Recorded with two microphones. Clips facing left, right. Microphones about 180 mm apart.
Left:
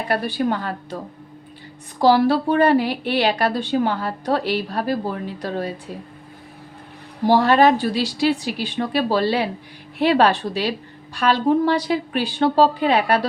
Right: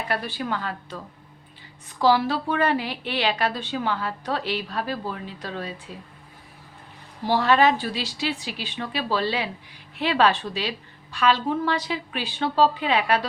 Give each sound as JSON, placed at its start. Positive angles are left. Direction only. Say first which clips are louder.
{"t": 0.0, "sound": "a woman's voice", "louder": "left 7 dB", "side_deg": 40}
{"t": 7.3, "sound": "a woman's voice", "louder": "left 5 dB", "side_deg": 40}